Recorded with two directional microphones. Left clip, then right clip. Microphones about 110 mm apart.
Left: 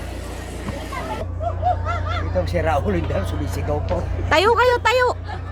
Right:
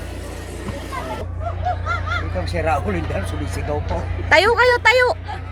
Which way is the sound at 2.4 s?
25° left (ahead or behind).